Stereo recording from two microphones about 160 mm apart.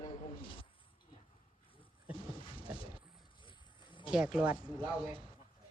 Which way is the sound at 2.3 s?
35° left (ahead or behind).